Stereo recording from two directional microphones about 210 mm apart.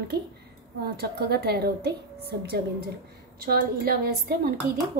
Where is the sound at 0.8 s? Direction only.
50° right (ahead or behind).